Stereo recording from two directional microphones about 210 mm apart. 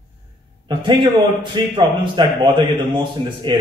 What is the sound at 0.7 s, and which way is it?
A man's voice, 20° right (ahead or behind).